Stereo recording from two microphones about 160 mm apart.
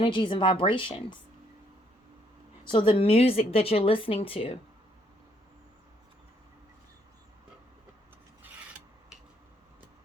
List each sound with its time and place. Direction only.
0.0 s a woman's voice: 30° left (ahead or behind)
2.7 s a woman's voice: 35° left (ahead or behind)